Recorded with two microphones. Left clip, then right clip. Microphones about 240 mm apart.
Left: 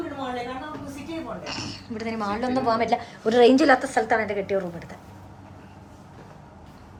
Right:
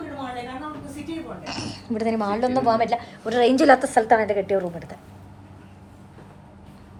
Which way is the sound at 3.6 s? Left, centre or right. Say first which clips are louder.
Right 4 dB; centre.